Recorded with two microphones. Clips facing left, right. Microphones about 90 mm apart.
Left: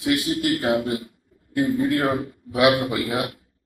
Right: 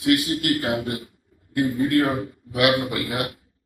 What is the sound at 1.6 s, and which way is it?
Speech, 20° left (ahead or behind).